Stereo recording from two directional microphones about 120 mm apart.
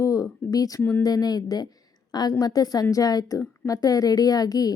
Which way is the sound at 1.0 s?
30° left (ahead or behind).